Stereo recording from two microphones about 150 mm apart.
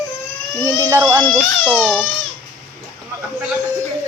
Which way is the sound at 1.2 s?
5° left (ahead or behind).